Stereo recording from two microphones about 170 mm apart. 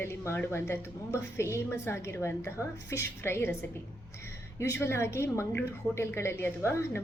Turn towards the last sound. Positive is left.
turn(degrees=15)  # may be behind; listen again after turning